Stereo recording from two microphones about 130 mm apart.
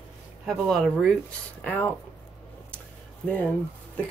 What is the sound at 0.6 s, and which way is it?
Speech, centre (ahead or behind).